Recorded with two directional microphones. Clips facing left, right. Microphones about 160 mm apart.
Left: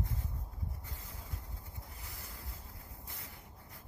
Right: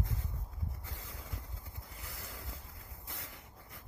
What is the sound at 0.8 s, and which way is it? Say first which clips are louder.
Wind noise: right 1 dB; 90° right.